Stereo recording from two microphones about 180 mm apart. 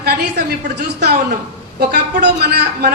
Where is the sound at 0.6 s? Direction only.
65° right (ahead or behind).